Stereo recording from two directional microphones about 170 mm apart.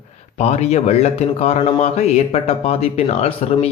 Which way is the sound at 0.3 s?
40° left (ahead or behind).